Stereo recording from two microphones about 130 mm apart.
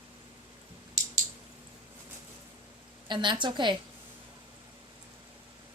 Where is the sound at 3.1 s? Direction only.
35° right (ahead or behind).